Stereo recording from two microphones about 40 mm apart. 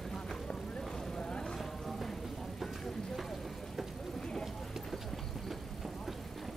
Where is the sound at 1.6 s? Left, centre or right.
Centre.